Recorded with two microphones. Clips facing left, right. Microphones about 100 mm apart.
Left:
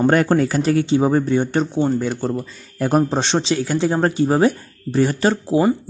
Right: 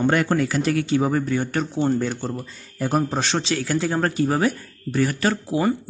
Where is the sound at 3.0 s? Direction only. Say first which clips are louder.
Left 4 dB; 25° left (ahead or behind).